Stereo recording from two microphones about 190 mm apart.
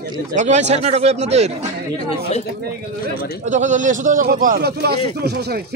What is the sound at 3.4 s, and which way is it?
A man's voice, 40° right (ahead or behind).